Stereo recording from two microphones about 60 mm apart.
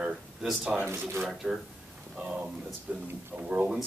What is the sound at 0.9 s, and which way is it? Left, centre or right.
Speech, right.